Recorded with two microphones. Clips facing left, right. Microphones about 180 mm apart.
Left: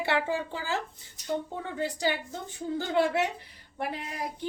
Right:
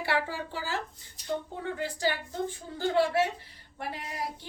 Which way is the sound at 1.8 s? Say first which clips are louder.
Left 2 dB; 20° left (ahead or behind).